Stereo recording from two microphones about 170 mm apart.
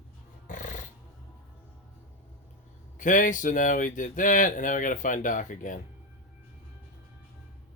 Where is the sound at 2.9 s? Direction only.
50° left (ahead or behind).